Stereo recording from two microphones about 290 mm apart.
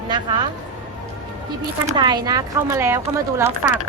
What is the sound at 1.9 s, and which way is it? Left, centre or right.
A woman's voice, centre.